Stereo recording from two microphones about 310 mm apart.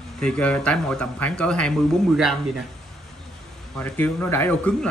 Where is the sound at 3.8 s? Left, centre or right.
Centre.